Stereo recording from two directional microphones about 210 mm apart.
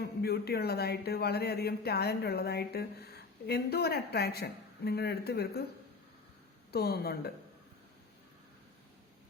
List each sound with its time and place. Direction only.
0.2 s speech: 50° left (ahead or behind)
6.7 s speech: 50° left (ahead or behind)